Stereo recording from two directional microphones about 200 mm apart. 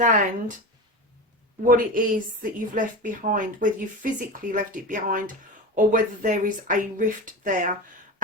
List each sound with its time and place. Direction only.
0.0 s a woman's voice: 40° right (ahead or behind)
1.6 s a woman's voice: 45° right (ahead or behind)